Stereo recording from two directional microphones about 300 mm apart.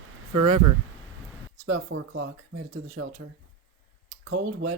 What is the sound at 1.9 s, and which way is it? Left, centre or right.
Speech, right.